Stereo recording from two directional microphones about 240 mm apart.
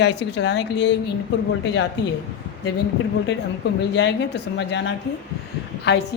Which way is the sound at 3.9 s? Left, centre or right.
Left.